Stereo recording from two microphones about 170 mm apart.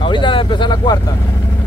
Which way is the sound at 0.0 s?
30° left (ahead or behind).